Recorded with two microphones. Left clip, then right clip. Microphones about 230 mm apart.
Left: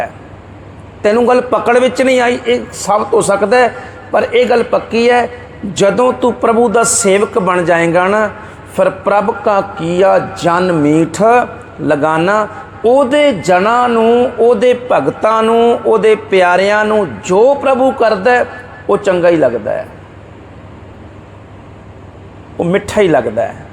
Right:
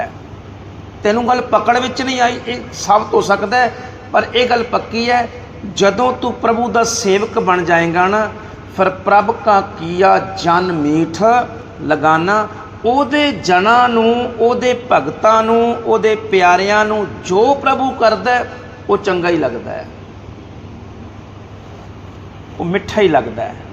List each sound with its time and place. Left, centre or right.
1.0 s a man's voice: left
22.6 s a man's voice: left